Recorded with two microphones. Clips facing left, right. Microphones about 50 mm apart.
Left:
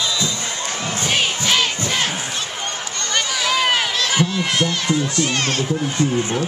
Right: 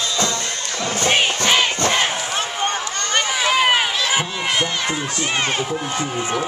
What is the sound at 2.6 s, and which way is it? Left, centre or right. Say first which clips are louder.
Run: right 4 dB; right.